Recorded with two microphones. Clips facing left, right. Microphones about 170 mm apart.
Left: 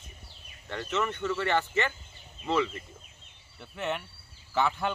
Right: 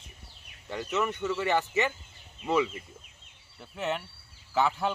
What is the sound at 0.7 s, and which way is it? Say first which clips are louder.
Speech: right 1 dB; 15° right (ahead or behind).